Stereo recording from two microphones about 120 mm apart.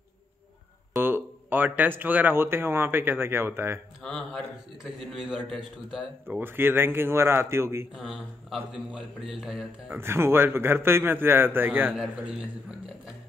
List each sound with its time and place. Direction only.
1.0 s a man's voice: 15° right (ahead or behind)
4.0 s a man's voice: 5° left (ahead or behind)
6.2 s a man's voice: 20° right (ahead or behind)
7.9 s a man's voice: centre (ahead or behind)
9.9 s a man's voice: 20° right (ahead or behind)